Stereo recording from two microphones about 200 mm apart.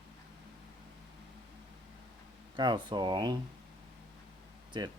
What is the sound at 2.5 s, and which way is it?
Speech, 20° right (ahead or behind).